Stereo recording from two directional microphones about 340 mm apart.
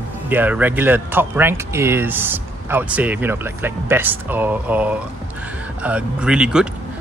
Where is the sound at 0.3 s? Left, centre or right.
Centre.